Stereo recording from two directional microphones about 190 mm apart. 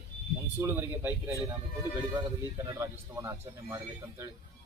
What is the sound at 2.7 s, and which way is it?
A man's voice, 15° right (ahead or behind).